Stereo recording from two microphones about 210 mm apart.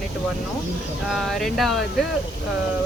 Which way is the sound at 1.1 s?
Centre (ahead or behind).